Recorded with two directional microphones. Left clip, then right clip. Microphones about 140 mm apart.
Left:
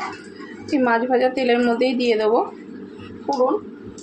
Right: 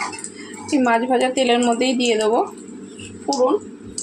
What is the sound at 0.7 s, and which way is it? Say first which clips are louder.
A woman's voice: right 1 dB; 30° right (ahead or behind).